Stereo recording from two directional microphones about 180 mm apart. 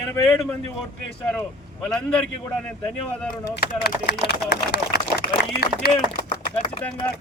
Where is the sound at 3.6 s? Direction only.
60° left (ahead or behind).